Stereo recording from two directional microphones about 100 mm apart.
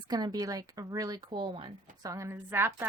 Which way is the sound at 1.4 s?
60° right (ahead or behind).